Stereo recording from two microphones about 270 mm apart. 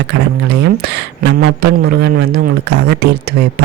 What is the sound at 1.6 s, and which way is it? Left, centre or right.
Speech, right.